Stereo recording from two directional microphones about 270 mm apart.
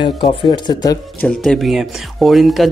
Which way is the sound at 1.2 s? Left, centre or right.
Centre.